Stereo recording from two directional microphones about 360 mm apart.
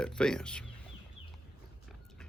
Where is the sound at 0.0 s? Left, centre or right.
Centre.